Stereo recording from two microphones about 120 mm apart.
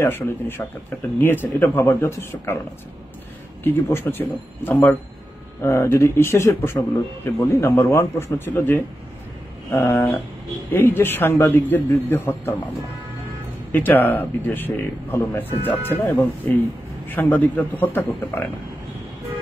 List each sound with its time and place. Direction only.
0.0 s a man's voice: 20° left (ahead or behind)
3.6 s a man's voice: 20° left (ahead or behind)
13.7 s a man's voice: 15° left (ahead or behind)